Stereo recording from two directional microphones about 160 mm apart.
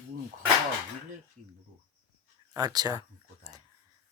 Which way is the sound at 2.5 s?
25° right (ahead or behind).